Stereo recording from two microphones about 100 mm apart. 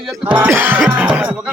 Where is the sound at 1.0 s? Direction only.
15° right (ahead or behind).